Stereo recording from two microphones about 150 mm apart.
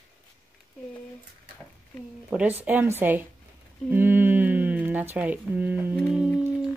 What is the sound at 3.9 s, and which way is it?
Speech, 15° right (ahead or behind).